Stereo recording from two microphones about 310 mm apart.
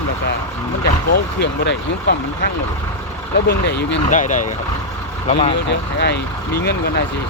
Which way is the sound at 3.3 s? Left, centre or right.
Left.